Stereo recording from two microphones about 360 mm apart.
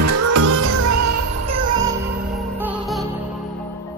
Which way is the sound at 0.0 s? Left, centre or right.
Right.